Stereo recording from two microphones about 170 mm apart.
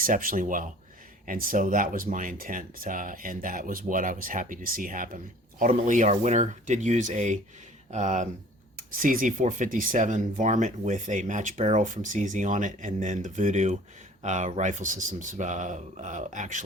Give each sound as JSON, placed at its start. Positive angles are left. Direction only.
{"t": 0.0, "sound": "speech", "side_deg": -55}